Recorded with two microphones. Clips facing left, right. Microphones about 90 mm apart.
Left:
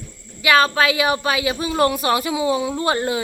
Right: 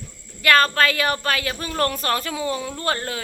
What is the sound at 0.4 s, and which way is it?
Speech, 5° left (ahead or behind).